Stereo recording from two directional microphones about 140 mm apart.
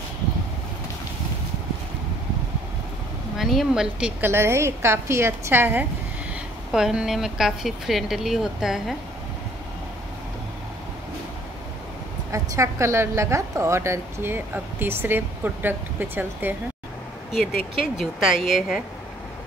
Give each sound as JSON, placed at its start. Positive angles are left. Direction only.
{"t": 3.3, "sound": "speech", "side_deg": 0}
{"t": 4.2, "sound": "a woman's voice", "side_deg": -15}
{"t": 12.3, "sound": "a woman's voice", "side_deg": -20}
{"t": 17.7, "sound": "speech", "side_deg": 0}